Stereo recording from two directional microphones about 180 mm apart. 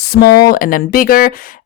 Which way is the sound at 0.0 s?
60° left (ahead or behind).